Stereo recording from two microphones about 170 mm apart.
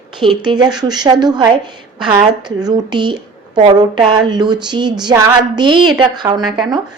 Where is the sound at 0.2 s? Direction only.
25° right (ahead or behind).